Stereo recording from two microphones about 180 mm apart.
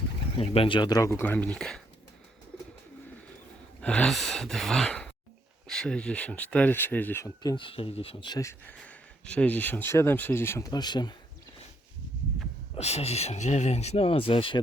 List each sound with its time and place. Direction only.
0.3 s speech: 30° left (ahead or behind); by 1.8 s 5° left (ahead or behind)
3.8 s speech: 5° left (ahead or behind)
7.5 s speech: 30° left (ahead or behind)
8.8 s speech: 5° left (ahead or behind); by 11.1 s 25° left (ahead or behind)
12.7 s speech: 35° left (ahead or behind)